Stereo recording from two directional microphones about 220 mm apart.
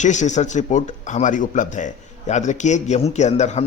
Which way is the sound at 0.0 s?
35° left (ahead or behind).